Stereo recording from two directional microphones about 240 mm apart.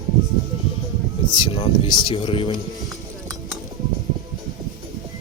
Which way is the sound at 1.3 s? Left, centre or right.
Centre.